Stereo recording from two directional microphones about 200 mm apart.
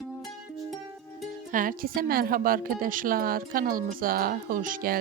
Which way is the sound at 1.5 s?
45° right (ahead or behind).